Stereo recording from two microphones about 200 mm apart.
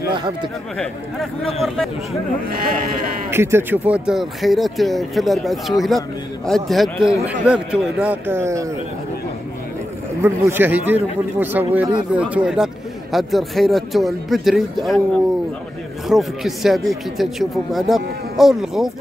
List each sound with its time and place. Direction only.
0.7 s speech: centre (ahead or behind)
2.5 s speech: 45° right (ahead or behind)
3.3 s a man's voice: 10° right (ahead or behind)
10.2 s a man's voice: 10° right (ahead or behind)
16.1 s speech: centre (ahead or behind)